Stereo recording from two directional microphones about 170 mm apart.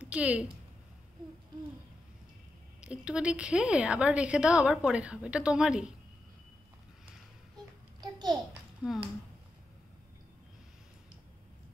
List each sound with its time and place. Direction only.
0.0 s a woman's voice: 5° right (ahead or behind)
2.8 s a woman's voice: 5° right (ahead or behind)
8.0 s a sound: 25° right (ahead or behind)